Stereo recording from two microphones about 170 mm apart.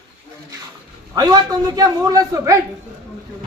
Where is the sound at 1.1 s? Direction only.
25° right (ahead or behind).